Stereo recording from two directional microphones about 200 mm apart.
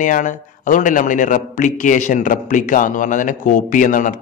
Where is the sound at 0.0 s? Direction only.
40° left (ahead or behind).